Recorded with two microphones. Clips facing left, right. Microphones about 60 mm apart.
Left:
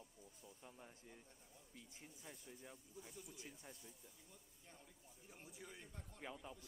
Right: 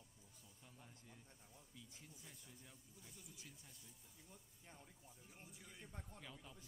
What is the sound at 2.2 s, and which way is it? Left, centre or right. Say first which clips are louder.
Speech: left 5 dB; left.